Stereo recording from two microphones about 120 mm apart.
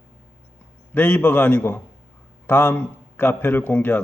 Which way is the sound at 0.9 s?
15° left (ahead or behind).